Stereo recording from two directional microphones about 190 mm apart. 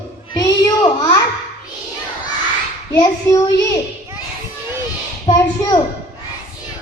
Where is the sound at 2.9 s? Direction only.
20° left (ahead or behind).